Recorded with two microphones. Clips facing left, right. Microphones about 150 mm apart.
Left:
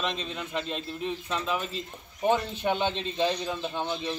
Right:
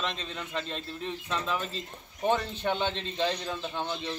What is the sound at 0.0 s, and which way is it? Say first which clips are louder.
A man's voice: left 3 dB; 15° left (ahead or behind).